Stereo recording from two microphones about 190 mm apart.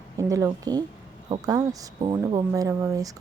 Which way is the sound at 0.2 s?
15° right (ahead or behind).